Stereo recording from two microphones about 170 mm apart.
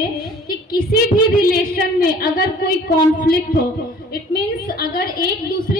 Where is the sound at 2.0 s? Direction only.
65° left (ahead or behind).